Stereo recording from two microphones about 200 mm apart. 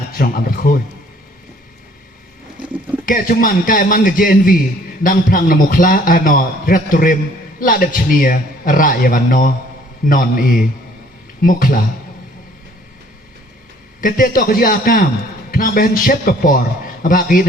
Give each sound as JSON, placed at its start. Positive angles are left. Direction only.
{"t": 0.2, "sound": "a man's voice", "side_deg": 45}
{"t": 3.1, "sound": "a man's voice", "side_deg": 45}
{"t": 14.0, "sound": "a man's voice", "side_deg": 45}